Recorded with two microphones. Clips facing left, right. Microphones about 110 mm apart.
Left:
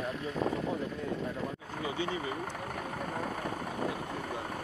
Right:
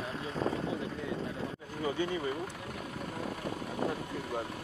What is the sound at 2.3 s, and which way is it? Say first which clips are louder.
Vehicle: even; 50° left (ahead or behind).